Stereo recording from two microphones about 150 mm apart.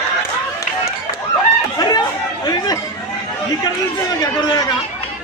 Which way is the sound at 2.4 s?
25° left (ahead or behind).